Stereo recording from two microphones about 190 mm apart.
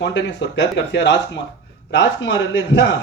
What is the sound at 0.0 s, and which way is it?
A man's voice, 65° left (ahead or behind).